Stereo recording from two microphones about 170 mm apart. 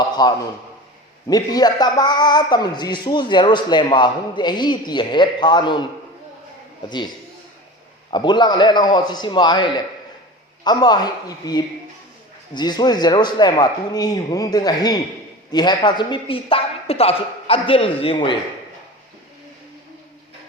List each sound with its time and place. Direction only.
0.2 s a man's voice: 25° left (ahead or behind)
8.1 s a man's voice: 25° left (ahead or behind)